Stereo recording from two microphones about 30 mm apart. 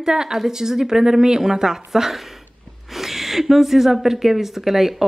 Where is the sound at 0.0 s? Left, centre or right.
Centre.